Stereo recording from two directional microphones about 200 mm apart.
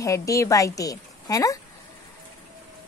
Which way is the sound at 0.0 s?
15° left (ahead or behind).